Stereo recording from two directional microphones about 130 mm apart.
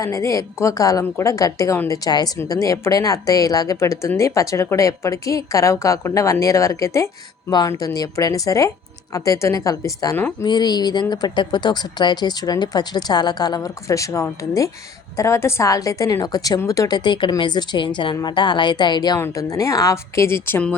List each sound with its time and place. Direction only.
0.0 s a woman's voice: 25° left (ahead or behind)
17.0 s a woman's voice: 35° left (ahead or behind); by 20.7 s 15° left (ahead or behind)